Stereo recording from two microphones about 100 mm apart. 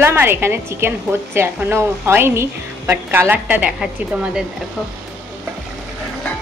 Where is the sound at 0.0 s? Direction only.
20° right (ahead or behind); by 4.5 s 5° right (ahead or behind).